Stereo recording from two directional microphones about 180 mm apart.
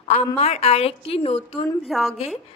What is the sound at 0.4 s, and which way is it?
A woman's voice, 35° left (ahead or behind).